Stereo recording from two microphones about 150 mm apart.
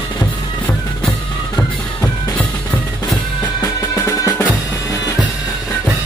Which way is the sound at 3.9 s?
20° left (ahead or behind).